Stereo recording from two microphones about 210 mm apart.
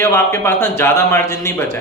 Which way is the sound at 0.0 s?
15° left (ahead or behind).